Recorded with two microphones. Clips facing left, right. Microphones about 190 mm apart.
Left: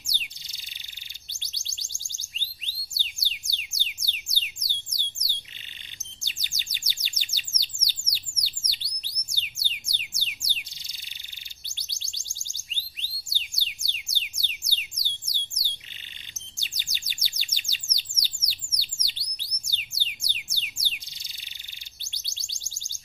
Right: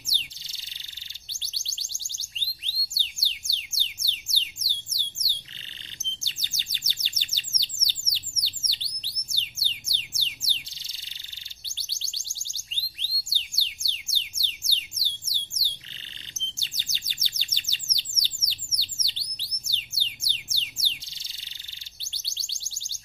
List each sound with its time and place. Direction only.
0.0 s bird: 15° left (ahead or behind)
1.4 s music: 15° left (ahead or behind)
6.2 s bird: 15° left (ahead or behind)
9.3 s music: 15° left (ahead or behind)
11.7 s music: 15° left (ahead or behind)
14.0 s music: 15° left (ahead or behind)
15.0 s a sound: 15° left (ahead or behind)
16.3 s chirp: 15° left (ahead or behind)
20.1 s music: 15° left (ahead or behind)
22.1 s music: 15° left (ahead or behind)